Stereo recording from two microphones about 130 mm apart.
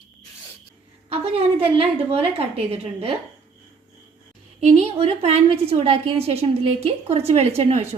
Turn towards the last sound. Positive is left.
turn(degrees=-55)  # may be behind; listen again after turning